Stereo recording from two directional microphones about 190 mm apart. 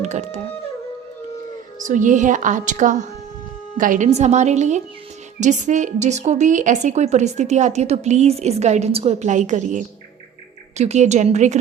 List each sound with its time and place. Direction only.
0.0 s music: 35° right (ahead or behind)
1.8 s a woman's voice: 40° right (ahead or behind)